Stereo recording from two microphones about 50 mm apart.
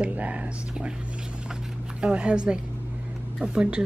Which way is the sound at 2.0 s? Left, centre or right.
Right.